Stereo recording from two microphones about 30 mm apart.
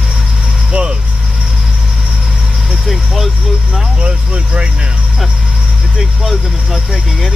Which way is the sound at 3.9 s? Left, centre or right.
Right.